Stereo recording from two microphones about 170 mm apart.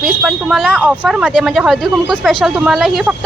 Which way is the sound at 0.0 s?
5° right (ahead or behind).